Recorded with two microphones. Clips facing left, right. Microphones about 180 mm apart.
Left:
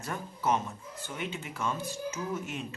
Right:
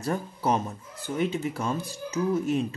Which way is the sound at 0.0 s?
35° right (ahead or behind).